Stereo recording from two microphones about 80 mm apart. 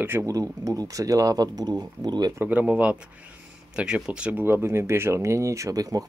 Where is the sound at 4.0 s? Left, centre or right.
Centre.